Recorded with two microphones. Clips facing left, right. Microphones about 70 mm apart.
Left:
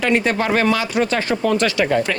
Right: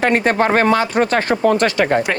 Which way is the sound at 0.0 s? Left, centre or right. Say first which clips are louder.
Right 3 dB; right.